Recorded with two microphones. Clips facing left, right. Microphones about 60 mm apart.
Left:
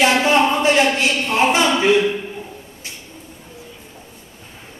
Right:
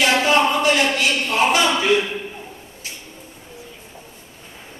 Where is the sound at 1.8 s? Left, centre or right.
Centre.